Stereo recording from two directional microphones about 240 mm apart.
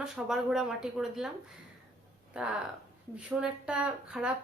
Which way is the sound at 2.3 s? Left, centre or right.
Centre.